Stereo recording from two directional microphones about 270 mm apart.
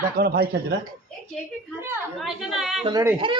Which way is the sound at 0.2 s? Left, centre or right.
Right.